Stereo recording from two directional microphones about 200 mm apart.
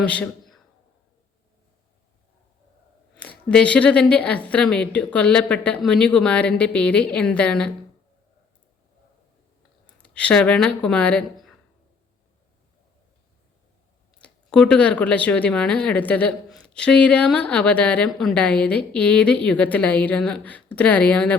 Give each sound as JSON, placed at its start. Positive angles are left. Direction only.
{"t": 0.0, "sound": "a man's voice", "side_deg": 5}
{"t": 3.2, "sound": "speech", "side_deg": 5}
{"t": 9.8, "sound": "speech", "side_deg": 5}
{"t": 14.2, "sound": "speech", "side_deg": 5}